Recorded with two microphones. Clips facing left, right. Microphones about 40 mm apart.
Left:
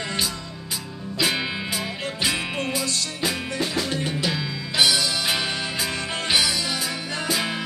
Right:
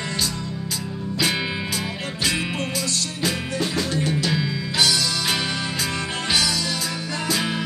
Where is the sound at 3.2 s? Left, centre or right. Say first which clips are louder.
Right 1 dB; centre.